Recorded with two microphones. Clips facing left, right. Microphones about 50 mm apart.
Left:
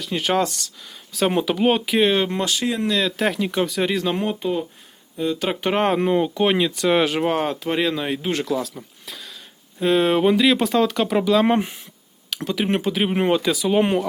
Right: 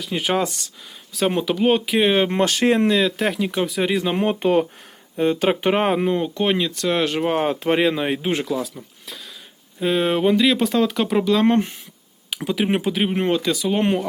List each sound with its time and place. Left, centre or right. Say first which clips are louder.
0.0 s speech: left 1 dB; centre
2.1 s speech: right 2 dB; right
2.4 s speech: right 5 dB; right
3.0 s speech: right 1 dB; centre
3.9 s speech: right 1 dB; centre
4.4 s speech: right 6 dB; right
5.1 s speech: right 4 dB; right
5.7 s speech: left 1 dB; centre
7.8 s speech: right 3 dB; right
8.4 s speech: left 1 dB; centre
12.3 s speech: right 1 dB; centre